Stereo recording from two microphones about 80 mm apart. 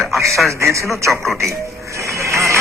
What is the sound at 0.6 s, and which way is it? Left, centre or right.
Speech, right.